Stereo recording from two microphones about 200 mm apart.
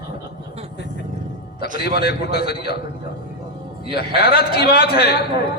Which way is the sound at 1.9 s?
50° left (ahead or behind).